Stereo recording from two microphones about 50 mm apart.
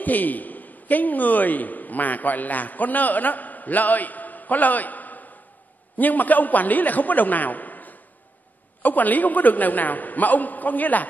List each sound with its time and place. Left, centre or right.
0.0 s a man's voice: left